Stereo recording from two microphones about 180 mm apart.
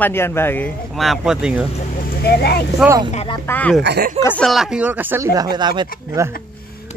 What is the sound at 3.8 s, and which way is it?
Speech, 70° right (ahead or behind).